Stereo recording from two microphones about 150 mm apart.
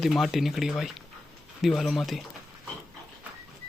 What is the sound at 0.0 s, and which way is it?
Speech, centre (ahead or behind).